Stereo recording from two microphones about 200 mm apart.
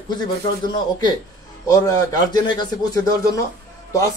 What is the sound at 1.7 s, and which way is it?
A man's voice, 15° left (ahead or behind).